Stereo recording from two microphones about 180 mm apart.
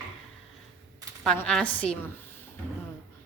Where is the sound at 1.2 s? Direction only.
5° left (ahead or behind).